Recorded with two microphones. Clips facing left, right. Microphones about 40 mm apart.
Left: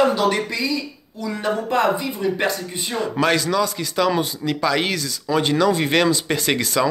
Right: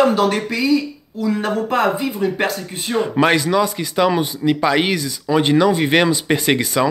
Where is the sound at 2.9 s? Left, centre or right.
Right.